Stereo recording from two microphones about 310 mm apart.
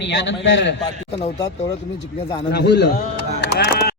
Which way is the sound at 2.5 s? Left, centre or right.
Left.